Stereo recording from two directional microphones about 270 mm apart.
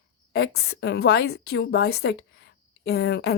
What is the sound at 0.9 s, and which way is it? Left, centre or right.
Speech, left.